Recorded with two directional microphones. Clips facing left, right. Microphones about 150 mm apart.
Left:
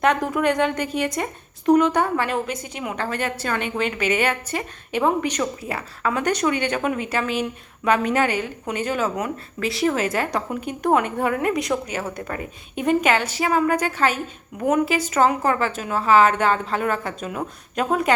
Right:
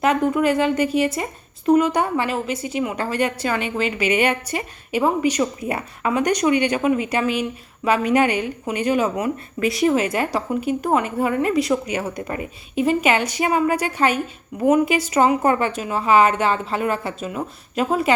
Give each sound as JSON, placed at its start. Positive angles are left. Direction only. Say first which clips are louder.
{"t": 0.0, "sound": "a woman's voice", "louder": "right 2 dB", "side_deg": 0}
{"t": 5.6, "sound": "speech", "louder": "right 3 dB", "side_deg": -20}
{"t": 6.1, "sound": "a woman's voice", "louder": "right 3 dB", "side_deg": -10}
{"t": 11.9, "sound": "a woman's voice", "louder": "right 3 dB", "side_deg": -15}
{"t": 14.5, "sound": "a woman's voice", "louder": "right 5 dB", "side_deg": 0}
{"t": 14.8, "sound": "a woman's voice", "louder": "right 2 dB", "side_deg": -10}
{"t": 15.4, "sound": "a woman's voice", "louder": "right 3 dB", "side_deg": -20}